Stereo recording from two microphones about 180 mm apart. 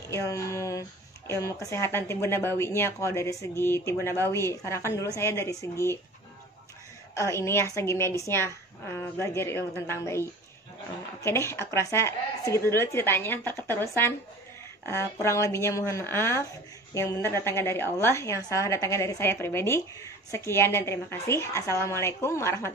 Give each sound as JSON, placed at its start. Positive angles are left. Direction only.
{"t": 0.1, "sound": "speech", "side_deg": 15}
{"t": 7.2, "sound": "speech", "side_deg": 15}
{"t": 11.2, "sound": "speech", "side_deg": 15}
{"t": 15.2, "sound": "speech", "side_deg": 15}